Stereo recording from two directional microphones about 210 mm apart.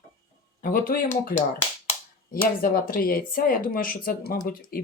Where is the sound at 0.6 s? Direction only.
40° left (ahead or behind).